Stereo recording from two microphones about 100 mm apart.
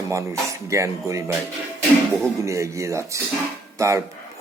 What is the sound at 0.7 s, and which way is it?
Speech, 30° right (ahead or behind).